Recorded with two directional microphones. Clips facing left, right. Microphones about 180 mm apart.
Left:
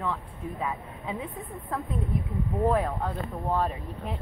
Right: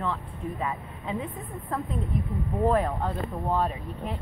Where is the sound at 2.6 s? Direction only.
10° left (ahead or behind).